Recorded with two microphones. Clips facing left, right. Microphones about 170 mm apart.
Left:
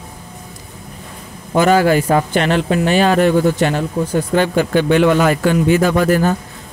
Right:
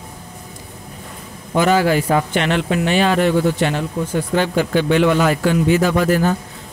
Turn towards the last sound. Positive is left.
turn(degrees=50)  # may be behind; listen again after turning